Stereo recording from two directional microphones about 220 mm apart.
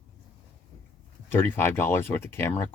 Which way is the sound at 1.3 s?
10° left (ahead or behind).